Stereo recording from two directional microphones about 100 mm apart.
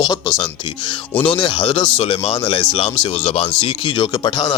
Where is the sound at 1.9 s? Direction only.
70° left (ahead or behind).